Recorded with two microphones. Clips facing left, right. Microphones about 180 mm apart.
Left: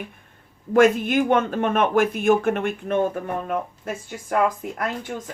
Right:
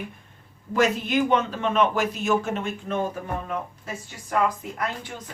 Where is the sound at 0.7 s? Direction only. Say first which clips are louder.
Left 6 dB; 50° left (ahead or behind).